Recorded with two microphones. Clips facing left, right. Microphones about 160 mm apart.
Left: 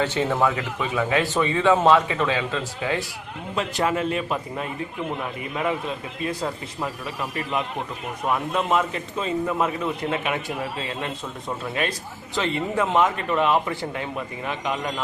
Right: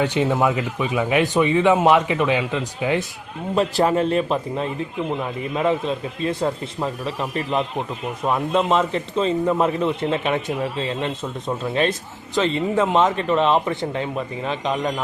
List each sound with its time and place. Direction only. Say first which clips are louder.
0.0 s speech: right 3 dB; 15° right (ahead or behind)
3.5 s a man's voice: right 6 dB; 35° right (ahead or behind)
6.4 s speech: right 5 dB; 20° right (ahead or behind)